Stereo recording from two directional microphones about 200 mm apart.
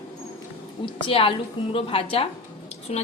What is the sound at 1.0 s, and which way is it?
A woman's voice, 25° left (ahead or behind).